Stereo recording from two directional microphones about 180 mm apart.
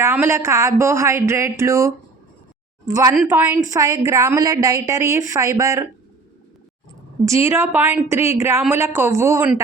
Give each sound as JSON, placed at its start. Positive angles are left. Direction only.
{"t": 0.0, "sound": "a woman's voice", "side_deg": -15}
{"t": 7.3, "sound": "a woman's voice", "side_deg": -15}